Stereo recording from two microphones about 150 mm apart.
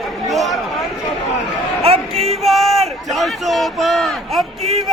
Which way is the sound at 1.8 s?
40° right (ahead or behind).